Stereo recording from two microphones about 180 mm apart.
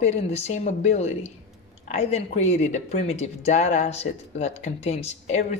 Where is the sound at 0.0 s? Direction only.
40° left (ahead or behind).